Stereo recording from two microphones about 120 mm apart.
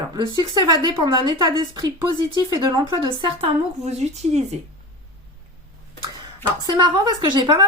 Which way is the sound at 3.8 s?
65° right (ahead or behind).